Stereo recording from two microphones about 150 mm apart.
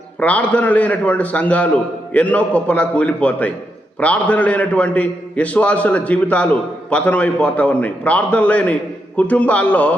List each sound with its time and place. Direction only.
0.2 s a man's voice: 10° left (ahead or behind)